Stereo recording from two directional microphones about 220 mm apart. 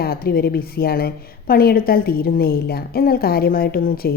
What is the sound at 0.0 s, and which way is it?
A woman's voice, 45° left (ahead or behind).